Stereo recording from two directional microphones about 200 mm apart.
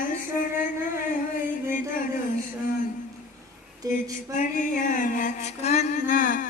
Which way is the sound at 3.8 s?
15° right (ahead or behind).